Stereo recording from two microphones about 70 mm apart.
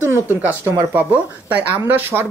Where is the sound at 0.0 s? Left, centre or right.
Right.